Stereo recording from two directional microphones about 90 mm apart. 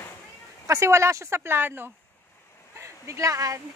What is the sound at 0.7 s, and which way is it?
Speech, 35° right (ahead or behind).